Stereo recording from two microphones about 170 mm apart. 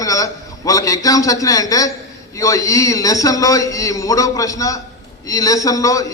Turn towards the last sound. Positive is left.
turn(degrees=20)  # may be behind; listen again after turning